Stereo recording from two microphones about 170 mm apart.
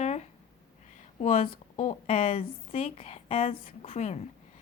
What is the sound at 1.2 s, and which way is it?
Speech, 55° left (ahead or behind).